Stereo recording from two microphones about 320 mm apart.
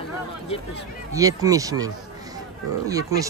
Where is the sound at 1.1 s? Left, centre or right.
Centre.